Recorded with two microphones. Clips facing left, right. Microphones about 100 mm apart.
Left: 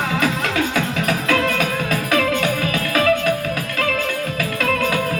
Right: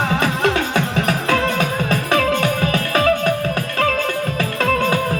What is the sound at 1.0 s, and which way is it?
Music, 30° right (ahead or behind).